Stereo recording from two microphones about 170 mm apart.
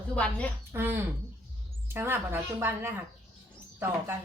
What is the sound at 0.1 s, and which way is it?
Speech, 5° left (ahead or behind).